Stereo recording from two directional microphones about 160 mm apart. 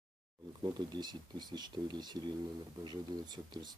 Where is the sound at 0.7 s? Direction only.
25° right (ahead or behind).